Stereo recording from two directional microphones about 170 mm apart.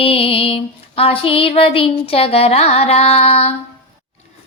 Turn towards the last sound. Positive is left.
turn(degrees=35)  # may be behind; listen again after turning